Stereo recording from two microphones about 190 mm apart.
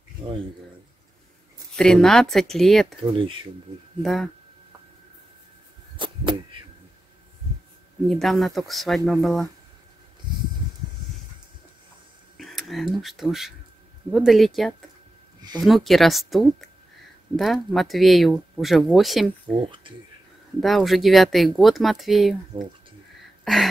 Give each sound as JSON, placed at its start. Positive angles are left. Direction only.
{"t": 1.8, "sound": "speech", "side_deg": 5}
{"t": 3.0, "sound": "speech", "side_deg": -25}
{"t": 4.0, "sound": "speech", "side_deg": 0}
{"t": 5.9, "sound": "a sound", "side_deg": -25}
{"t": 8.1, "sound": "speech", "side_deg": 0}
{"t": 12.4, "sound": "speech", "side_deg": 0}
{"t": 19.6, "sound": "speech", "side_deg": -25}
{"t": 20.6, "sound": "speech", "side_deg": 0}
{"t": 23.4, "sound": "a sound", "side_deg": 0}